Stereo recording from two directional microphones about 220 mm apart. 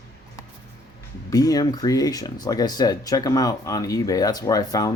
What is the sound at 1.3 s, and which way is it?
Speech, 15° left (ahead or behind).